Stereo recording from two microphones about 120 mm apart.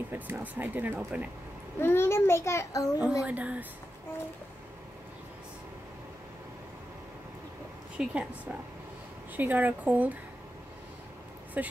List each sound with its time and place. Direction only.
0.1 s speech: 15° right (ahead or behind)
1.8 s a child's voice: 20° left (ahead or behind)
3.0 s speech: 5° right (ahead or behind)
8.0 s speech: 10° right (ahead or behind)
9.4 s speech: 15° right (ahead or behind)
11.6 s speech: 15° right (ahead or behind)